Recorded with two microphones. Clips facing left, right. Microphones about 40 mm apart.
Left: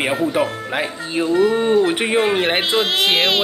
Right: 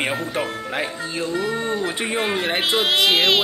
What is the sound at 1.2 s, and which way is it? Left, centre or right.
Speech, centre.